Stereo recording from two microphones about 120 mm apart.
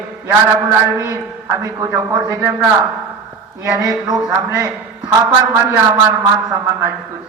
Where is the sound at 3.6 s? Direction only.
25° right (ahead or behind).